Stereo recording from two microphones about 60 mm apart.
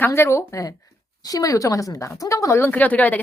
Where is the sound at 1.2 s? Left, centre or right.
Left.